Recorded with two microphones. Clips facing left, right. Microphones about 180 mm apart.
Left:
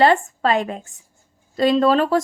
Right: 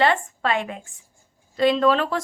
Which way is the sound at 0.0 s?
40° left (ahead or behind).